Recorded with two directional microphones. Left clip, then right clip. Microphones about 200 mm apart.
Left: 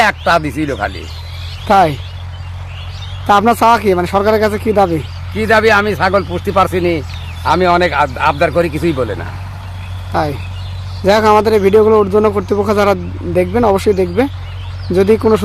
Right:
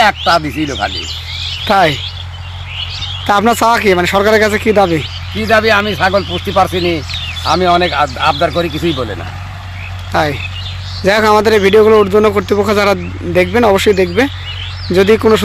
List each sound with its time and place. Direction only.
0.0 s a man's voice: 15° left (ahead or behind)
1.6 s speech: 5° right (ahead or behind)
3.2 s speech: 10° right (ahead or behind)
5.4 s a man's voice: 15° left (ahead or behind)
10.1 s speech: 5° right (ahead or behind)